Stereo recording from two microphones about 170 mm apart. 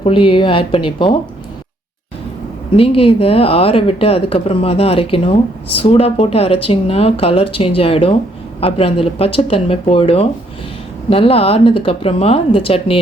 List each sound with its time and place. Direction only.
0.0 s speech: 30° left (ahead or behind)
2.7 s speech: 35° left (ahead or behind)